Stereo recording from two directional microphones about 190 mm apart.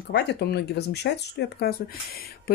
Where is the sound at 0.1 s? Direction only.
65° left (ahead or behind).